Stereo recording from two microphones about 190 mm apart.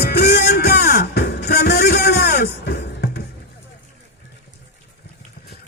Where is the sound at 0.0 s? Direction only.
55° left (ahead or behind).